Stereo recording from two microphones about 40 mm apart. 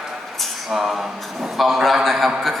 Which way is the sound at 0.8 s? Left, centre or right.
Centre.